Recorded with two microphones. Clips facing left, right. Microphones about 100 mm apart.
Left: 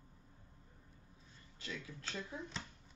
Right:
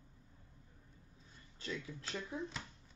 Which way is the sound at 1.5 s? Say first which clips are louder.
Right 3 dB; 35° right (ahead or behind).